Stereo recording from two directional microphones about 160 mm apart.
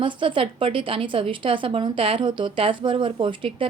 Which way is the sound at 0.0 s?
30° right (ahead or behind).